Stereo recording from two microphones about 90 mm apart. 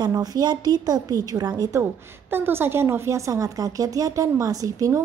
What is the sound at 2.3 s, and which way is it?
A woman's voice, 25° right (ahead or behind).